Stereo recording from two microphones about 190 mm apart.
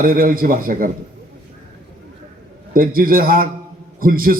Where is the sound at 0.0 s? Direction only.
50° right (ahead or behind).